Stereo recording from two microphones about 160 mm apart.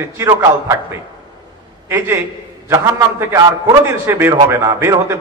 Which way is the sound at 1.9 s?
15° right (ahead or behind).